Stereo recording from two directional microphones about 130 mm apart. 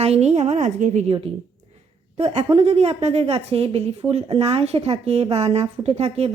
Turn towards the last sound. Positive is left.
turn(degrees=-55)  # may be behind; listen again after turning